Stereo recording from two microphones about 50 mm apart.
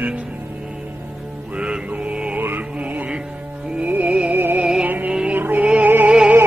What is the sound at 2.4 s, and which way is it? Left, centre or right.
Music, right.